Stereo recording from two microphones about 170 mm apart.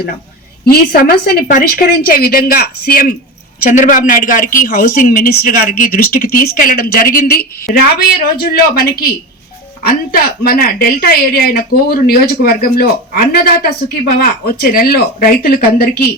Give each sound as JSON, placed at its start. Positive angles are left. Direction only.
{"t": 0.6, "sound": "a woman's voice", "side_deg": 65}